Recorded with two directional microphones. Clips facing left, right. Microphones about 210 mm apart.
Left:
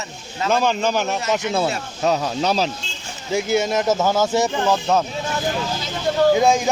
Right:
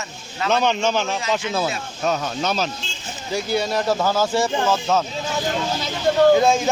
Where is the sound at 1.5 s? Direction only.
30° left (ahead or behind).